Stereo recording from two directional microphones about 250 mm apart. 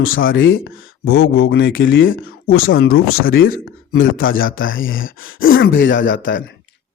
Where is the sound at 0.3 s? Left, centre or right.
Left.